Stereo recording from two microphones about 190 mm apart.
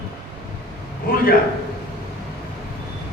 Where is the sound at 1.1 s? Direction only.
50° left (ahead or behind).